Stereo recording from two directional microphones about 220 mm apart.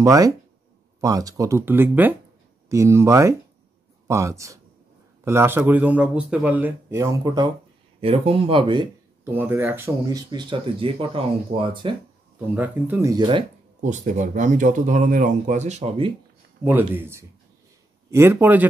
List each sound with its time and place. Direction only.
0.0 s speech: 15° right (ahead or behind)
9.2 s speech: 10° right (ahead or behind)
12.5 s speech: 10° right (ahead or behind)
13.8 s speech: 35° right (ahead or behind)
16.6 s speech: 10° right (ahead or behind)